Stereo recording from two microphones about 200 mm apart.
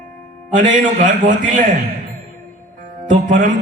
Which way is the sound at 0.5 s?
40° right (ahead or behind).